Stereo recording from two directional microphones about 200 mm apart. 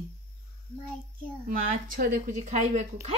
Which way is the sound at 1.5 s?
45° right (ahead or behind).